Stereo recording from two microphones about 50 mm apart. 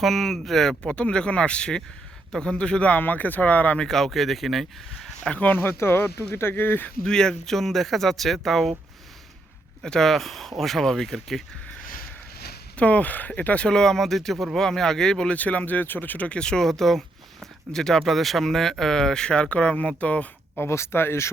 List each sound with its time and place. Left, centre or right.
0.0 s speech: centre
0.9 s speech: left
3.0 s speech: left
3.8 s speech: centre
5.2 s speech: left
5.5 s speech: left
7.0 s speech: centre
9.8 s speech: centre
12.7 s speech: left
13.7 s speech: centre
15.3 s speech: left
16.6 s speech: centre; by 20.2 s left
20.6 s speech: left